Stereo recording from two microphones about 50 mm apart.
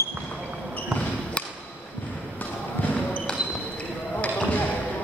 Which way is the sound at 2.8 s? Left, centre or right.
Left.